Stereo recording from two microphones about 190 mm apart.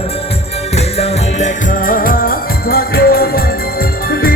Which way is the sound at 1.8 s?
50° left (ahead or behind).